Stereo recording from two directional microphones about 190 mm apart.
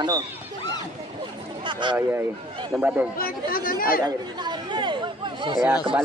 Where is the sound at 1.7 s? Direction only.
25° right (ahead or behind).